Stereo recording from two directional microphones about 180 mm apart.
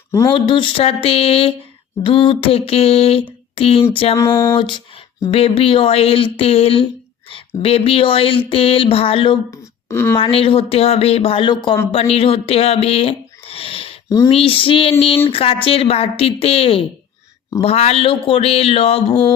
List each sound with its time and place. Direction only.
0.1 s speech: 15° left (ahead or behind)
0.3 s speech: 30° left (ahead or behind)
4.1 s a sound: 15° left (ahead or behind)
4.5 s speech: 25° left (ahead or behind)
9.5 s speech: 15° left (ahead or behind)
10.2 s speech: 30° left (ahead or behind)